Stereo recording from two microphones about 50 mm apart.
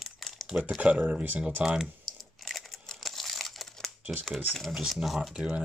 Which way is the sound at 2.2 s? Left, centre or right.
Centre.